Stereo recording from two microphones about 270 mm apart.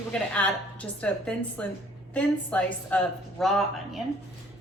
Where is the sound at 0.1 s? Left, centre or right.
Centre.